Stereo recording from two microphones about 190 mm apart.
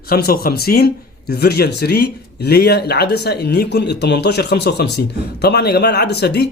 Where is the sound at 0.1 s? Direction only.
55° left (ahead or behind).